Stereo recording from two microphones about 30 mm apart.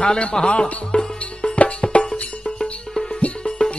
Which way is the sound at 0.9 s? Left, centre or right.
Left.